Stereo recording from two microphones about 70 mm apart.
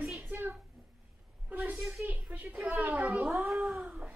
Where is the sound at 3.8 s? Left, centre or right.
Centre.